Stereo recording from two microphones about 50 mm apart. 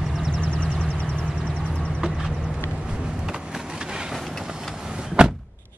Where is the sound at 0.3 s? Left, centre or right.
Left.